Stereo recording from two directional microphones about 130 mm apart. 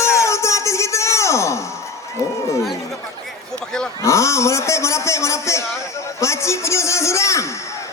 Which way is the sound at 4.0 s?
20° left (ahead or behind).